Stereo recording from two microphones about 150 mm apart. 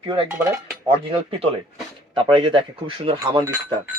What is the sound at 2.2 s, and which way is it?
Speech, 35° right (ahead or behind).